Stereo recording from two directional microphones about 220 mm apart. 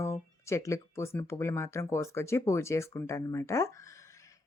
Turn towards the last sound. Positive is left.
turn(degrees=15)  # may be behind; listen again after turning